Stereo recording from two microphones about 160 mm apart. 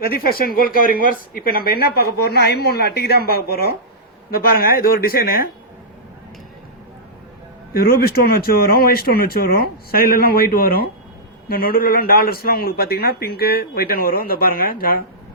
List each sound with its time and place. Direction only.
0.0 s speech: 70° left (ahead or behind)
7.7 s speech: 70° left (ahead or behind)